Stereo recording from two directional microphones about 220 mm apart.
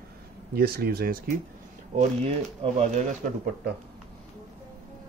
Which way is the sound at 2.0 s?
30° right (ahead or behind).